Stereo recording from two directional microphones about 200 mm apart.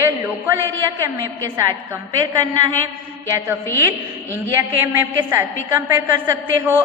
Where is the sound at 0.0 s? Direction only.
10° right (ahead or behind).